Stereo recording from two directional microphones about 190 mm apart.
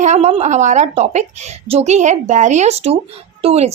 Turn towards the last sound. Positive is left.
turn(degrees=-35)  # may be behind; listen again after turning